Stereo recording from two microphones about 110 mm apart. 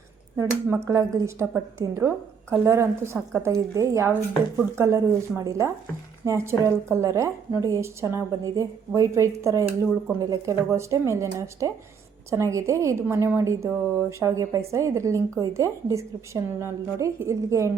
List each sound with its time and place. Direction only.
0.3 s a woman's voice: 25° right (ahead or behind)
10.2 s a woman's voice: 35° right (ahead or behind)